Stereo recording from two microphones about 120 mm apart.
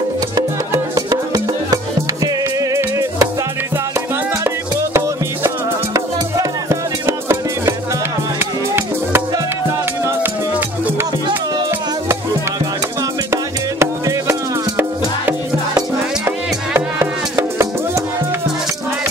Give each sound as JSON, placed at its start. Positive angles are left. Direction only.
{"t": 0.9, "sound": "music", "side_deg": -30}
{"t": 6.7, "sound": "music", "side_deg": -25}
{"t": 13.3, "sound": "music", "side_deg": -20}
{"t": 16.3, "sound": "music", "side_deg": -20}